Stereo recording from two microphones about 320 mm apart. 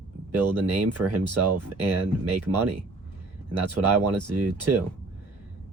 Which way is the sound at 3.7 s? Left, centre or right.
Right.